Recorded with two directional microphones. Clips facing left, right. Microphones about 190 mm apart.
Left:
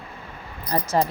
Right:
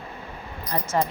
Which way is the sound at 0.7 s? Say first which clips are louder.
Left 3 dB; 35° left (ahead or behind).